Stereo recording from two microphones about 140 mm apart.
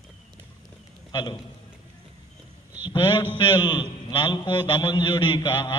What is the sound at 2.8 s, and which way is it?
Speech, 35° left (ahead or behind).